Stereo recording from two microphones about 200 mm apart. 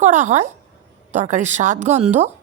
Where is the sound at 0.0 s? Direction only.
35° right (ahead or behind).